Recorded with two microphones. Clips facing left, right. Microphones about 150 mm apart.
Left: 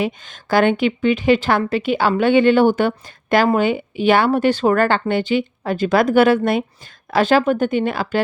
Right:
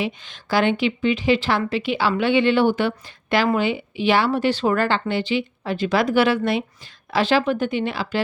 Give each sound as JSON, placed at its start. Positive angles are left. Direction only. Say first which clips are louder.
{"t": 0.0, "sound": "a woman's voice", "louder": "left 4 dB", "side_deg": 50}